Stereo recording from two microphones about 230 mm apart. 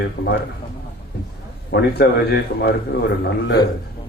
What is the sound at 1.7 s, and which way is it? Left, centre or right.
A man's voice, left.